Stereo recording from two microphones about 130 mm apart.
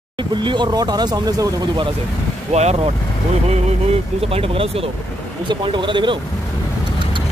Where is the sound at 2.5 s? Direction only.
55° right (ahead or behind).